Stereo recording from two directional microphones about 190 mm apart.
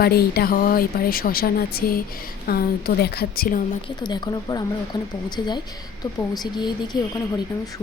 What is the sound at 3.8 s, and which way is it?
Speech, 25° left (ahead or behind).